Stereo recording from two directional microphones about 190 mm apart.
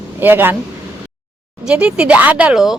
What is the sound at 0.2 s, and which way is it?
Speech, 10° right (ahead or behind).